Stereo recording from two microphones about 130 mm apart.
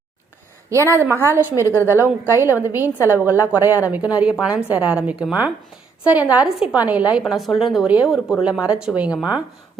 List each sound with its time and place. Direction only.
0.7 s a woman's voice: 20° right (ahead or behind)